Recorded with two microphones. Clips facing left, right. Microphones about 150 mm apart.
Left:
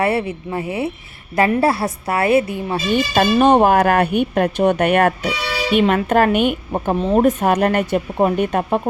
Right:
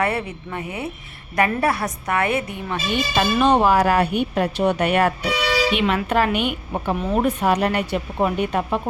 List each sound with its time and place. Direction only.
0.0 s speech: 25° left (ahead or behind); by 8.8 s 45° left (ahead or behind)